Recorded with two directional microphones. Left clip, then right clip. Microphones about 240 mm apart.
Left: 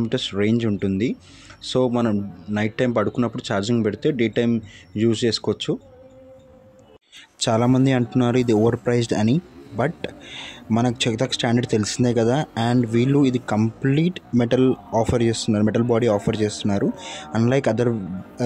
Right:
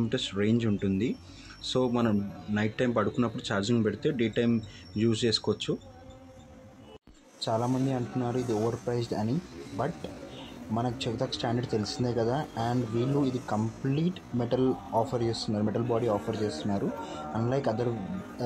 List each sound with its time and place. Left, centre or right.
0.1 s a man's voice: left
7.4 s speech: left